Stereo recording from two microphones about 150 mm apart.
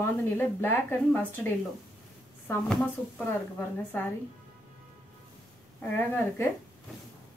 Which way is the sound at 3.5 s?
15° left (ahead or behind).